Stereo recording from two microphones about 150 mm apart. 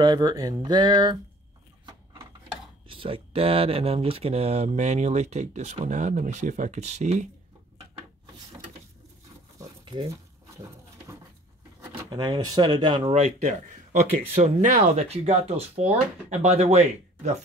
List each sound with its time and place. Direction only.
0.0 s speech: 30° right (ahead or behind)
2.9 s speech: 35° right (ahead or behind)
12.1 s speech: 30° right (ahead or behind)
13.1 s speech: 45° right (ahead or behind)